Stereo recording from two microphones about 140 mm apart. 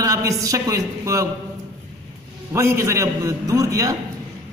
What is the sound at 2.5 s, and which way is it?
A man's voice, 20° right (ahead or behind).